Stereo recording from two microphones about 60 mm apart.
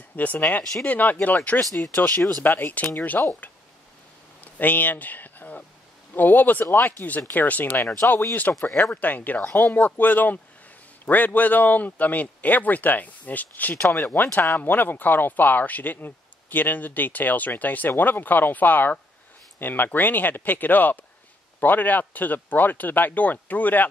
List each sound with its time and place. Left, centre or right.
0.1 s speech: left
4.4 s speech: left
8.0 s speech: left
8.5 s speech: left